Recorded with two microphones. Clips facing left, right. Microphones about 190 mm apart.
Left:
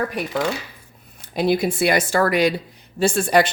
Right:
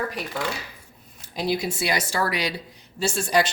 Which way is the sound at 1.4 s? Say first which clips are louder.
Left 6 dB; 55° left (ahead or behind).